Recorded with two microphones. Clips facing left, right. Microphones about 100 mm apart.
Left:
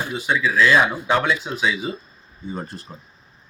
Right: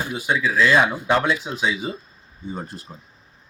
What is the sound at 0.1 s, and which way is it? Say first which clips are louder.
Speech: left 1 dB; 10° right (ahead or behind).